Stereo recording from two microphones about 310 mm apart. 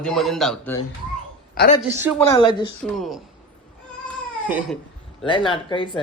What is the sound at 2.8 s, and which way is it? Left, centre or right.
Speech, centre.